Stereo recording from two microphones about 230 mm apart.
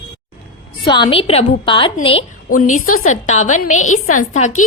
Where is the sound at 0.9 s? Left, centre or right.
Centre.